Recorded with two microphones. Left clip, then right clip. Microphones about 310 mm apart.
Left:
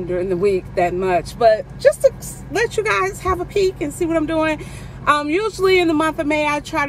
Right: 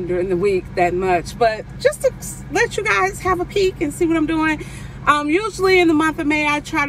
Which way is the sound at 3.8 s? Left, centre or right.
Centre.